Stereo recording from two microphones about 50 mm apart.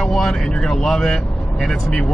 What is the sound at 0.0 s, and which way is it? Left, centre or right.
Speech, centre.